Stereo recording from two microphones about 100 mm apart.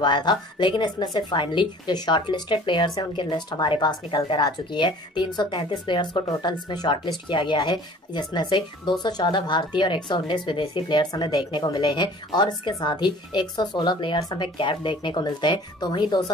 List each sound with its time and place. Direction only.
0.0 s a woman's voice: 50° left (ahead or behind)
1.3 s a woman's voice: 55° left (ahead or behind)